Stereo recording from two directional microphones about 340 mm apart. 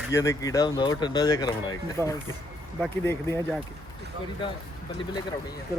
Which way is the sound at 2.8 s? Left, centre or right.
Centre.